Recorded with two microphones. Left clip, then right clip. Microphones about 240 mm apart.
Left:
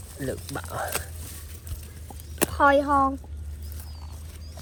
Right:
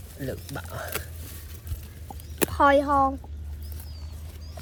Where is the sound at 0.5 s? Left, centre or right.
Centre.